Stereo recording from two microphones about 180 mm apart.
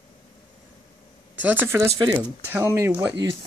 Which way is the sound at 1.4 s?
10° right (ahead or behind).